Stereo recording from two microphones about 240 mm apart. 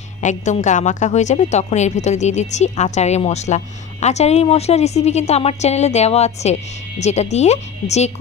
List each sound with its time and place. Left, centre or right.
0.2 s a woman's voice: left